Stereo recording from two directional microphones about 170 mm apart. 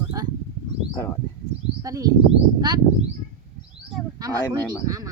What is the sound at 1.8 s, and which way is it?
Speech, 20° right (ahead or behind).